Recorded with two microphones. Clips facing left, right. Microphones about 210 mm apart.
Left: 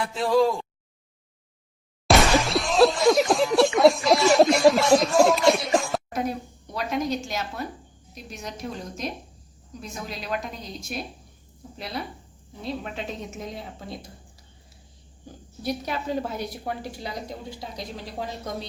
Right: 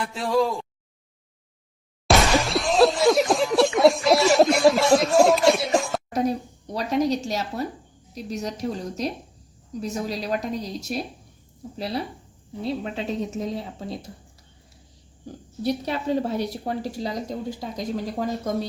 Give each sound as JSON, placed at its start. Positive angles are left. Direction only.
{"t": 0.0, "sound": "speech", "side_deg": 0}
{"t": 2.0, "sound": "a sound", "side_deg": 0}
{"t": 6.1, "sound": "a woman's voice", "side_deg": -40}
{"t": 15.6, "sound": "a woman's voice", "side_deg": -30}